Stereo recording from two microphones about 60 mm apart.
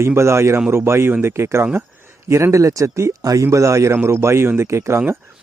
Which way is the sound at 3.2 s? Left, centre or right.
Right.